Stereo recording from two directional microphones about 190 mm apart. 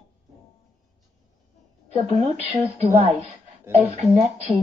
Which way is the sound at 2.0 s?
35° right (ahead or behind).